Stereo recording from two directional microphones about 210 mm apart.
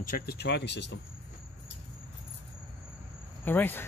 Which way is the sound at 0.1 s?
50° left (ahead or behind).